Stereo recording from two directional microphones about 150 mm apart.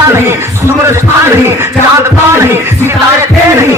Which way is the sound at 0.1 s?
15° right (ahead or behind).